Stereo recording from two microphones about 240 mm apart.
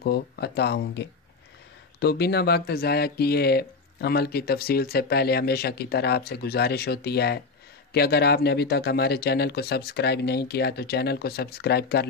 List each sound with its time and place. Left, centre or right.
0.0 s speech: left